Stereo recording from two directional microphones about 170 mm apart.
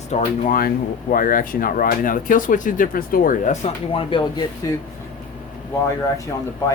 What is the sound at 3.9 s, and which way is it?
Speech, 30° left (ahead or behind).